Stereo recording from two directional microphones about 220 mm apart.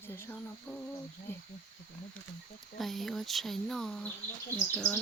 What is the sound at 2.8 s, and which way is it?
Speech, centre (ahead or behind).